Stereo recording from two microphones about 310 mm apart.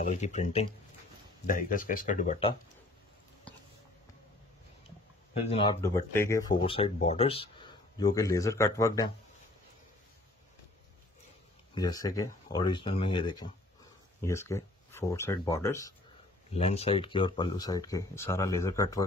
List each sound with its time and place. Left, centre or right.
0.0 s speech: left
3.5 s a sound: centre
5.3 s speech: centre
11.7 s speech: centre
16.5 s speech: centre